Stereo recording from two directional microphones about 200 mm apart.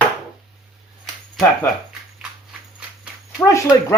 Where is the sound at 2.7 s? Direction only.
5° right (ahead or behind).